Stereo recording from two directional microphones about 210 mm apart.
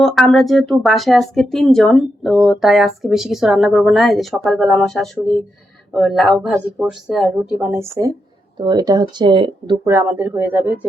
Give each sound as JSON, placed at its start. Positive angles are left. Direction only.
{"t": 0.0, "sound": "speech", "side_deg": 0}
{"t": 9.8, "sound": "speech", "side_deg": -10}